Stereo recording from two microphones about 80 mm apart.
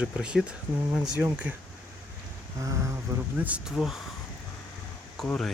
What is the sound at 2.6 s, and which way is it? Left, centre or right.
Speech, right.